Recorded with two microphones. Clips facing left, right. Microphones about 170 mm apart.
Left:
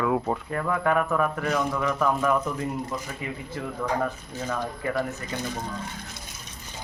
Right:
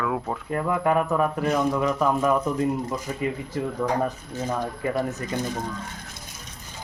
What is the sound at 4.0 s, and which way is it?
Speech, 20° right (ahead or behind).